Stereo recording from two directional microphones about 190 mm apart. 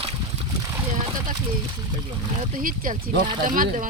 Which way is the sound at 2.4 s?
45° right (ahead or behind).